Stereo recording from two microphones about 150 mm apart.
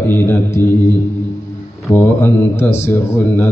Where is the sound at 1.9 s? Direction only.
15° left (ahead or behind).